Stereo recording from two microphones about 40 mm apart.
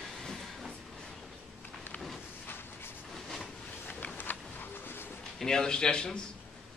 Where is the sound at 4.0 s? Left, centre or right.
Left.